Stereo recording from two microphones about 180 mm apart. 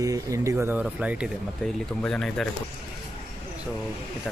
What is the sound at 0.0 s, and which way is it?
Speech, 20° right (ahead or behind).